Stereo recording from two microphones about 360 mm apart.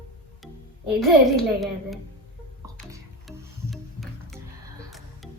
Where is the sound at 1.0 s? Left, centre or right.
Centre.